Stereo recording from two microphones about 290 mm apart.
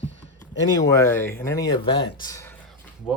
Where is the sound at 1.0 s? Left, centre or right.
Centre.